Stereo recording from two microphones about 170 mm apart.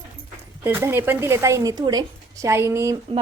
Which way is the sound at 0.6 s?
15° right (ahead or behind).